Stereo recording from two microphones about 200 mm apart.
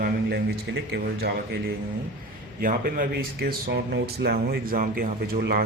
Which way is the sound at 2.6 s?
45° right (ahead or behind).